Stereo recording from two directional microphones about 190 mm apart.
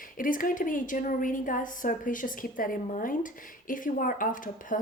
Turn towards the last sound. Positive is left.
turn(degrees=45)  # may be behind; listen again after turning